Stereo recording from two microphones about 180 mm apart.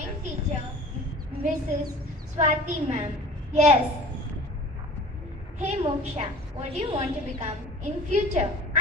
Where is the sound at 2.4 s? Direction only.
40° right (ahead or behind).